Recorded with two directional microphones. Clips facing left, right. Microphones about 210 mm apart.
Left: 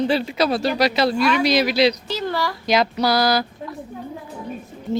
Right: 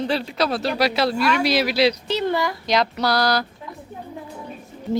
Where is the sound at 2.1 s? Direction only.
20° right (ahead or behind).